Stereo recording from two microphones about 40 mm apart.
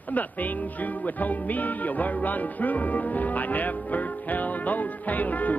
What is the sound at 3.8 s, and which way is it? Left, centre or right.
Music, left.